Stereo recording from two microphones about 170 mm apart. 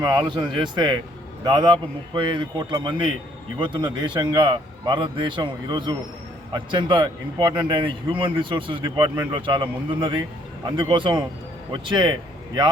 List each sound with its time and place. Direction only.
0.0 s speech: 25° right (ahead or behind)